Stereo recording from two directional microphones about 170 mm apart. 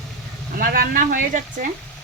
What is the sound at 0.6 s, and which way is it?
Speech, 60° right (ahead or behind).